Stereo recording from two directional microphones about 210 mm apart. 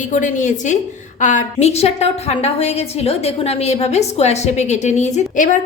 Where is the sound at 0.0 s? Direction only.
35° left (ahead or behind).